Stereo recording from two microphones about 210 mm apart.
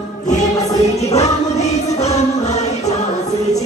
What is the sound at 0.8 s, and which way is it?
Music, 30° left (ahead or behind).